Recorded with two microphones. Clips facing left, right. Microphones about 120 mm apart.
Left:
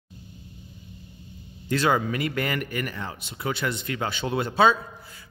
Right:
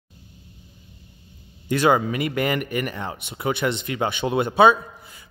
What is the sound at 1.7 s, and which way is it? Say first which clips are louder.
A man's voice: right 4 dB; 15° right (ahead or behind).